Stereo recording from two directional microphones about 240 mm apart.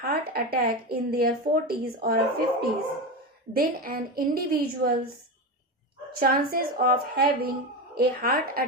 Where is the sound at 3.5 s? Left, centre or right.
Right.